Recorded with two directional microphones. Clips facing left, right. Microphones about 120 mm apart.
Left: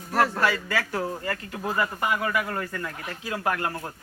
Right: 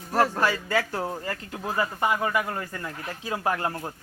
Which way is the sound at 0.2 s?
15° right (ahead or behind).